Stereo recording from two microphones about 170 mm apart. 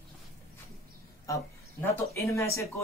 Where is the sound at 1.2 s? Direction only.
20° left (ahead or behind).